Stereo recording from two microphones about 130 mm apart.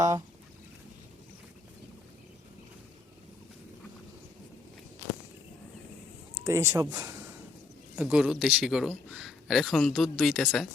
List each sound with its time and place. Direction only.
6.4 s speech: 20° right (ahead or behind)
7.9 s a man's voice: 5° right (ahead or behind)